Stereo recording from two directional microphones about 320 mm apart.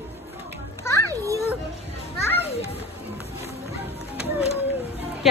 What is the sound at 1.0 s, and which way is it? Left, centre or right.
Children playing, centre.